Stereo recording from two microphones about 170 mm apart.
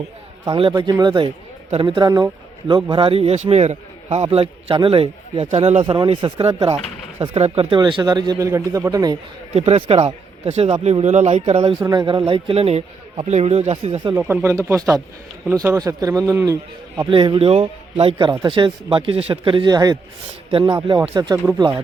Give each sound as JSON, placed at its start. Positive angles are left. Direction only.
{"t": 0.7, "sound": "a man's voice", "side_deg": -20}
{"t": 9.6, "sound": "a man's voice", "side_deg": -35}
{"t": 11.8, "sound": "a man's voice", "side_deg": -25}
{"t": 14.2, "sound": "speech", "side_deg": -10}
{"t": 17.1, "sound": "a man's voice", "side_deg": -30}
{"t": 21.2, "sound": "speech", "side_deg": -20}